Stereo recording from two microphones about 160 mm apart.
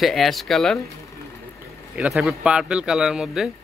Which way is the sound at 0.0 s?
Centre (ahead or behind).